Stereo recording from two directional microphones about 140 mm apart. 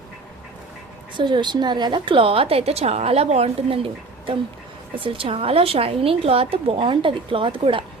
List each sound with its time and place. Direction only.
1.1 s a woman's voice: 35° right (ahead or behind)